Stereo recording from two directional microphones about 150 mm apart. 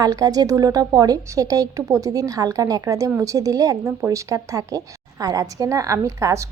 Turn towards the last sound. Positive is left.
turn(degrees=-20)  # may be behind; listen again after turning